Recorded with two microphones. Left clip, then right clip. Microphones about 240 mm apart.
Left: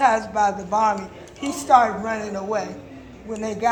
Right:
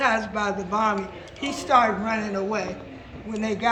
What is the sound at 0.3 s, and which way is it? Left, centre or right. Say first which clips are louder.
A woman's voice: left 5 dB; centre.